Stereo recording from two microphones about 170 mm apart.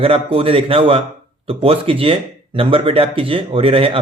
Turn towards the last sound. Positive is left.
turn(degrees=-35)  # may be behind; listen again after turning